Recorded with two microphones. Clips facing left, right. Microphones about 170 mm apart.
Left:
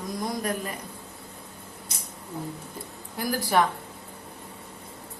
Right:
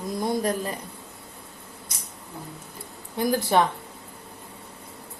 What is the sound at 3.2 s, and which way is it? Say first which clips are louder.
Speech: right 3 dB; 25° right (ahead or behind).